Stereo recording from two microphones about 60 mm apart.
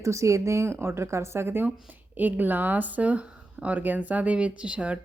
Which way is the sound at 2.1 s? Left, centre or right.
Right.